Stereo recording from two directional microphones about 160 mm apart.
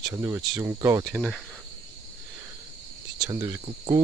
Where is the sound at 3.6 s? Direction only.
35° right (ahead or behind).